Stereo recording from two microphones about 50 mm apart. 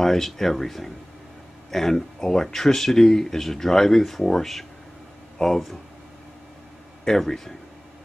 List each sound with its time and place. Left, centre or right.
0.0 s speech: centre
7.1 s speech: centre